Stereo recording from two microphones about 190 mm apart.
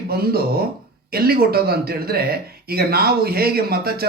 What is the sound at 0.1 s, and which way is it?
Speech, 55° right (ahead or behind).